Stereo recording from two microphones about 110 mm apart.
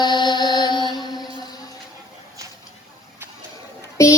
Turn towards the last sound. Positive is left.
turn(degrees=30)  # may be behind; listen again after turning